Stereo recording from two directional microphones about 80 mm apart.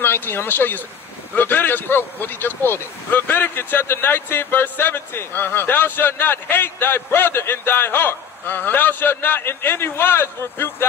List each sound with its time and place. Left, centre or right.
0.0 s speech: left